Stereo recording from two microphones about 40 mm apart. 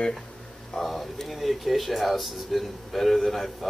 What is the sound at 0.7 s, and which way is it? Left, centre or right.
Speech, centre.